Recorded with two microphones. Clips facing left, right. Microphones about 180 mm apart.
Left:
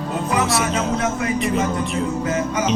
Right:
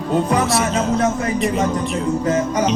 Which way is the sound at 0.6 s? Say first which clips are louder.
Right 3 dB; 30° right (ahead or behind).